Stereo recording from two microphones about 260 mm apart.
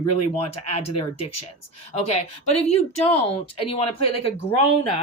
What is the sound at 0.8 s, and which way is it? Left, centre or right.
Speech, left.